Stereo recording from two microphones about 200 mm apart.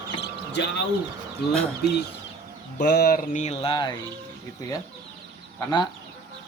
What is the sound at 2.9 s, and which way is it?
Mantra, 50° left (ahead or behind).